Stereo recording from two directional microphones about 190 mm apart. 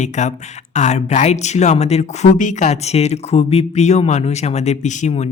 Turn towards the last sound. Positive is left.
turn(degrees=40)  # may be behind; listen again after turning